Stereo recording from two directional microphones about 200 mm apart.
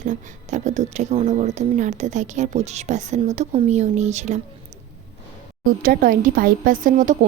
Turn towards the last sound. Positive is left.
turn(degrees=-40)  # may be behind; listen again after turning